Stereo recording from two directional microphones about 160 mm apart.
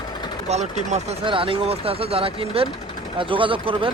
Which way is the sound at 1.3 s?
35° right (ahead or behind).